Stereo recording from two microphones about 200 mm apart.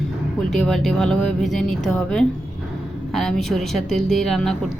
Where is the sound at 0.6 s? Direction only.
Centre (ahead or behind).